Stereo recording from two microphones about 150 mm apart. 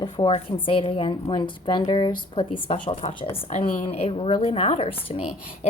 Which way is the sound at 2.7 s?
55° left (ahead or behind).